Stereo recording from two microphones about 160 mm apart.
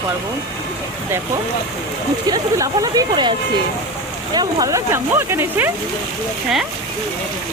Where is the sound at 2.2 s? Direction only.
25° right (ahead or behind).